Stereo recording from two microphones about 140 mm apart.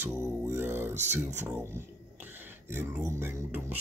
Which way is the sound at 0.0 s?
15° right (ahead or behind).